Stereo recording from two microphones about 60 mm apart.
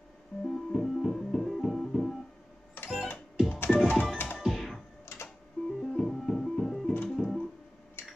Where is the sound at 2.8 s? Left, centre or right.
Left.